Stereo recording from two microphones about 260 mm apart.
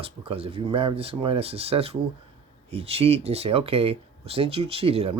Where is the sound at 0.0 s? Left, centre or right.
Right.